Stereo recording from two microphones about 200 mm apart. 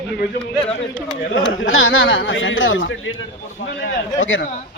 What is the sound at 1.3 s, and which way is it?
A man's voice, 75° left (ahead or behind).